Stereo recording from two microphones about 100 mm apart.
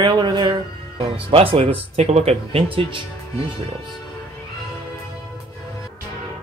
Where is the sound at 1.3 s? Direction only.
65° right (ahead or behind).